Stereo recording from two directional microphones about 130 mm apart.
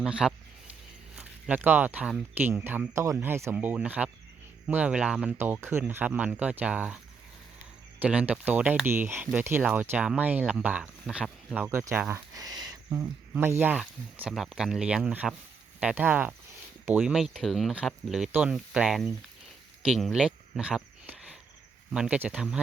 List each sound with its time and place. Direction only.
0.0 s speech: 5° right (ahead or behind)
12.3 s speech: 30° right (ahead or behind); by 19.1 s 5° right (ahead or behind)
19.8 s cricket: centre (ahead or behind)
21.9 s speech: 5° right (ahead or behind)